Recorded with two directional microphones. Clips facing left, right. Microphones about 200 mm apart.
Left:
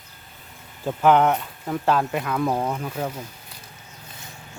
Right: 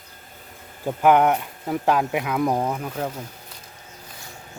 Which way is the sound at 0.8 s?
10° right (ahead or behind).